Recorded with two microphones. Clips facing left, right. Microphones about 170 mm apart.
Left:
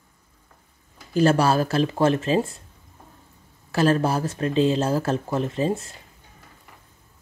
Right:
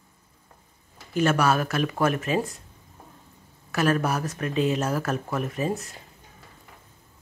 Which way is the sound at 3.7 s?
30° left (ahead or behind).